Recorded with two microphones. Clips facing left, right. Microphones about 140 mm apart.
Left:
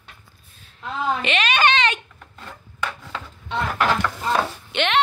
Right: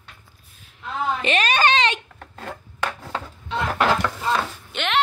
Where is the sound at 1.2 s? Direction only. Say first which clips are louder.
Right 2 dB; 40° right (ahead or behind).